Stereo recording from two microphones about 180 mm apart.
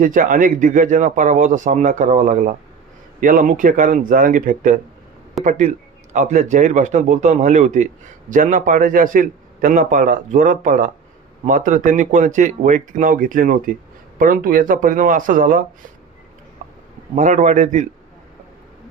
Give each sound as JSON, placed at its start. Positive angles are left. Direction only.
{"t": 0.0, "sound": "a man's voice", "side_deg": -50}
{"t": 17.2, "sound": "a man's voice", "side_deg": -45}